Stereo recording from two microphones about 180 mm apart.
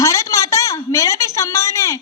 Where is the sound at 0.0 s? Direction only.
20° left (ahead or behind).